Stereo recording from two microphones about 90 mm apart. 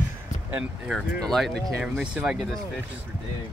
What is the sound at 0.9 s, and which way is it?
Speech, 5° left (ahead or behind).